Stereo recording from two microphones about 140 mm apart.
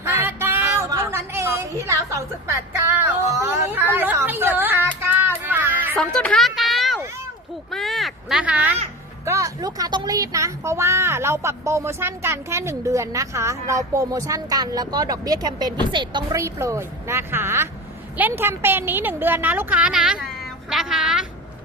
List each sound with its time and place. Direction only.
0.0 s a sound: 15° right (ahead or behind)
5.0 s child singing: 15° right (ahead or behind)
6.1 s a sound: 5° left (ahead or behind)
7.7 s caw: centre (ahead or behind)
9.2 s speech: 20° right (ahead or behind)
16.4 s a woman's voice: 20° right (ahead or behind); by 21.2 s 5° right (ahead or behind)